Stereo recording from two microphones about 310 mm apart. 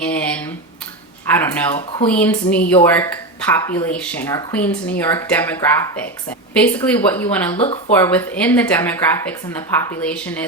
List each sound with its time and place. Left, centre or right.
0.0 s a sound: centre
1.3 s speech: centre
7.5 s speech: centre
7.9 s speech: centre